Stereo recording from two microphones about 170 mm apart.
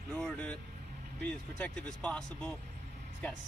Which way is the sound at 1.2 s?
5° left (ahead or behind).